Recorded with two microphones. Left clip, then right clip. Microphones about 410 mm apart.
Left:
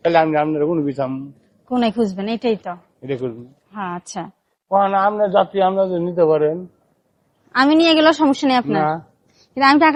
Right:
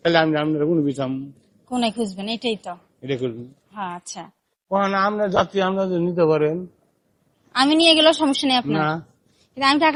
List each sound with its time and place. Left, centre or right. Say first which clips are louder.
0.0 s a man's voice: left 3 dB; centre
1.7 s a woman's voice: left 5 dB; left
3.0 s speech: left 1 dB; centre
3.7 s a woman's voice: left 3 dB; left
4.7 s a man's voice: left 4 dB; centre
7.5 s a woman's voice: left 2 dB; left